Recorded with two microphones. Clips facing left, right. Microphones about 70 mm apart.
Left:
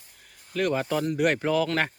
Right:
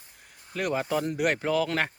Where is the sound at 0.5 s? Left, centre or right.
Centre.